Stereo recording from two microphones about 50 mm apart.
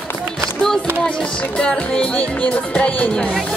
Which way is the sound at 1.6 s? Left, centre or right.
Left.